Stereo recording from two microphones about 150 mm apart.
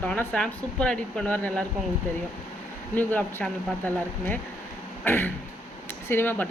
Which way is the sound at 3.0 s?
10° left (ahead or behind).